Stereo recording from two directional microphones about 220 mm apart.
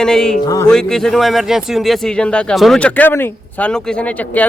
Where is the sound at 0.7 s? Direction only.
5° left (ahead or behind).